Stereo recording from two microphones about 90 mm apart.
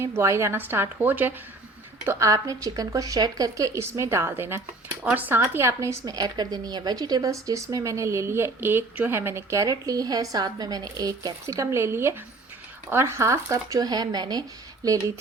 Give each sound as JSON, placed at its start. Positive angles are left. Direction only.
{"t": 0.0, "sound": "a woman's voice", "side_deg": -30}
{"t": 2.0, "sound": "speech", "side_deg": -35}
{"t": 3.8, "sound": "a woman's voice", "side_deg": -30}
{"t": 6.1, "sound": "speech", "side_deg": -50}